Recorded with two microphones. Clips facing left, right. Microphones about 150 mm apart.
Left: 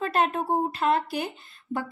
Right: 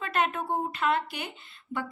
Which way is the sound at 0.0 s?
35° left (ahead or behind).